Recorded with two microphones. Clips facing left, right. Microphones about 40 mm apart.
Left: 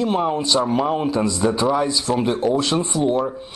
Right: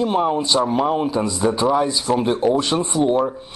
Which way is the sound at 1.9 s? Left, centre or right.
Centre.